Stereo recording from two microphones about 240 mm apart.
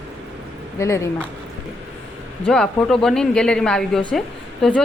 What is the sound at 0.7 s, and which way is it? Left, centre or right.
Speech, centre.